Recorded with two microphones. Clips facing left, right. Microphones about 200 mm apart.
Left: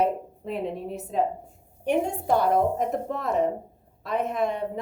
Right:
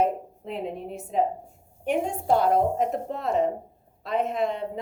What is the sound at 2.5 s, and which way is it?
Speech, 50° left (ahead or behind).